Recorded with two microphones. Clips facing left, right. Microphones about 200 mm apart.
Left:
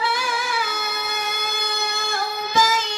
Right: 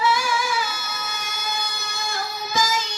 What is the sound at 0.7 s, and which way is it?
Music, 60° left (ahead or behind).